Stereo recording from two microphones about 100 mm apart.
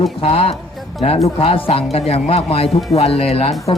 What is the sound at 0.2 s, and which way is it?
Speech, 70° left (ahead or behind).